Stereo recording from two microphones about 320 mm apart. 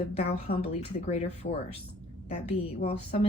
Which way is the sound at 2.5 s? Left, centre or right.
Centre.